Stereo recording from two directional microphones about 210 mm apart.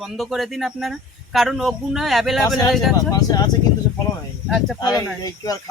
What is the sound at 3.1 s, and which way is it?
Speech, 20° left (ahead or behind).